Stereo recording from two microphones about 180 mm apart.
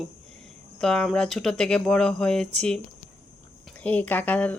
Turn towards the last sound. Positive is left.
turn(degrees=10)  # may be behind; listen again after turning